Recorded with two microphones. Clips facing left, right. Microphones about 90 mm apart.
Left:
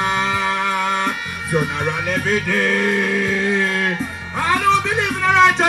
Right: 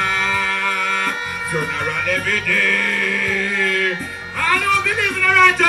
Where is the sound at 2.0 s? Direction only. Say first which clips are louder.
Left 2 dB; 25° left (ahead or behind).